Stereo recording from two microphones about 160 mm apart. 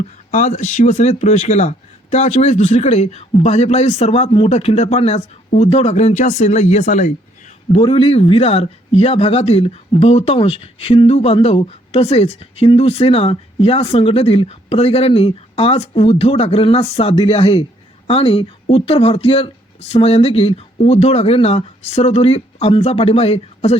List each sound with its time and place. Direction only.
0.3 s speech: 50° left (ahead or behind)